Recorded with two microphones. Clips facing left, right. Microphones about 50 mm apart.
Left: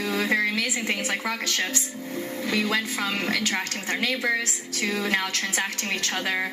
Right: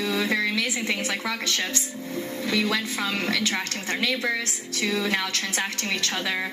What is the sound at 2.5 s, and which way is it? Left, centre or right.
A woman's voice, left.